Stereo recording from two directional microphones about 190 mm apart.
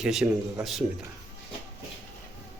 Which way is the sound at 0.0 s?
5° right (ahead or behind).